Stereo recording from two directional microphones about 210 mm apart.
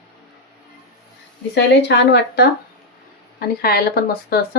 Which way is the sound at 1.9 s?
55° left (ahead or behind).